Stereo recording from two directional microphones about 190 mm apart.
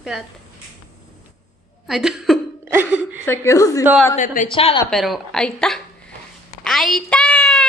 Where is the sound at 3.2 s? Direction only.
15° left (ahead or behind).